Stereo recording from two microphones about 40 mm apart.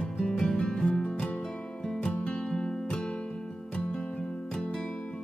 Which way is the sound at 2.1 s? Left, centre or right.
Left.